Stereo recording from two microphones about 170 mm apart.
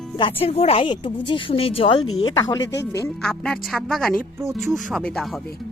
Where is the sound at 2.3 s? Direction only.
20° left (ahead or behind).